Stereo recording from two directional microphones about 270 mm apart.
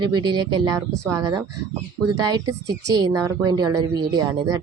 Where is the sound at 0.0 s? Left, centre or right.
Centre.